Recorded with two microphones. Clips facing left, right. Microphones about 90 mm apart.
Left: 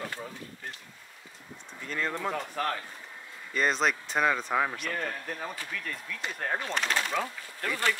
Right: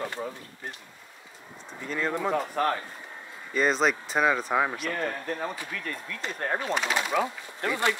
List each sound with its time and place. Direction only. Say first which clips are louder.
0.0 s speech: right 5 dB; 20° right (ahead or behind)
1.9 s speech: right 4 dB; 10° right (ahead or behind)
3.5 s speech: right 3 dB; centre (ahead or behind); by 8.0 s 20° right (ahead or behind)